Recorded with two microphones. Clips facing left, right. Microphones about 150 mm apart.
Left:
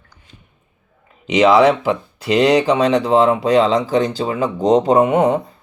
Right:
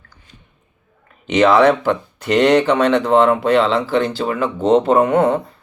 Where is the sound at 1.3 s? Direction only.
10° left (ahead or behind).